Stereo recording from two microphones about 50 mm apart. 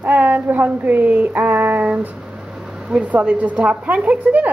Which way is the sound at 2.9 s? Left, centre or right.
Right.